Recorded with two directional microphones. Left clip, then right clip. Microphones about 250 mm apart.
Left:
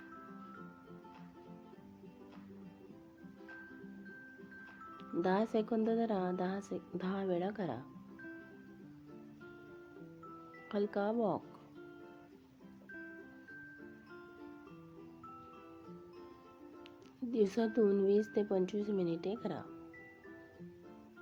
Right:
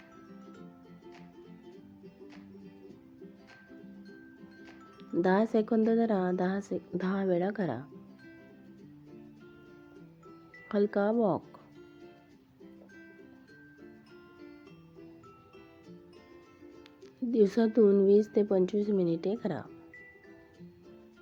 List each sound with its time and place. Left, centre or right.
4.9 s speech: centre
10.7 s speech: centre
17.3 s speech: centre